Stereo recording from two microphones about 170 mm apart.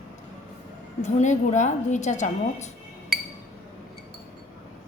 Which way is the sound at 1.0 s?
45° left (ahead or behind).